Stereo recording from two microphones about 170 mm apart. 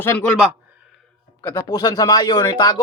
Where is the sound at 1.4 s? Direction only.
15° left (ahead or behind).